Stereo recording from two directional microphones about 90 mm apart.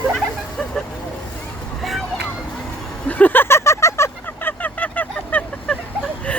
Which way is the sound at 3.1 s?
20° left (ahead or behind).